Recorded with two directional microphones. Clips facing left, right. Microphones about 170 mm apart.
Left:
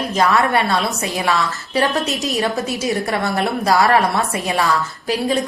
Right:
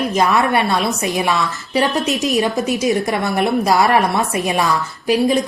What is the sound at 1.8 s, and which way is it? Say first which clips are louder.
A woman's voice: right 2 dB; 20° right (ahead or behind).